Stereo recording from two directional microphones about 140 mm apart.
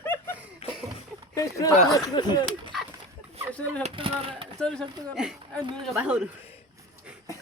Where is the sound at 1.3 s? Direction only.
25° left (ahead or behind).